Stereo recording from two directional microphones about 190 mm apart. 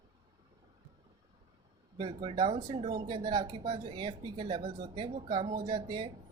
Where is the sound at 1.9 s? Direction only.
25° right (ahead or behind).